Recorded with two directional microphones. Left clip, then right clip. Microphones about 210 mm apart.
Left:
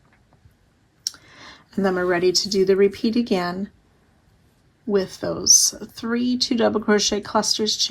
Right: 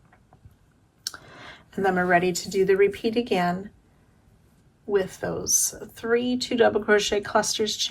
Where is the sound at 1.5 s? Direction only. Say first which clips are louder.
Left 1 dB; 20° left (ahead or behind).